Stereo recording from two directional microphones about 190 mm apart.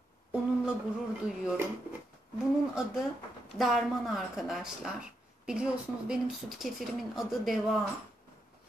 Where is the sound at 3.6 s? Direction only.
Centre (ahead or behind).